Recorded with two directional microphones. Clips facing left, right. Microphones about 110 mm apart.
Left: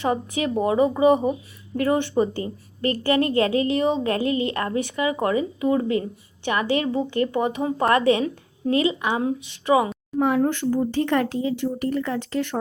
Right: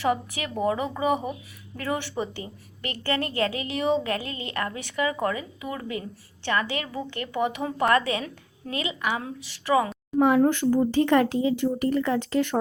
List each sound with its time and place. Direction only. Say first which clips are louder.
0.0 s a woman's voice: left 3 dB; 30° left (ahead or behind)
2.1 s a woman's voice: left 9 dB; 35° left (ahead or behind)
10.2 s speech: right 1 dB; 10° right (ahead or behind)